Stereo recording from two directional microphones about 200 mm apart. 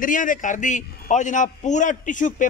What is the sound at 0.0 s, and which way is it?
A man's voice, 40° left (ahead or behind).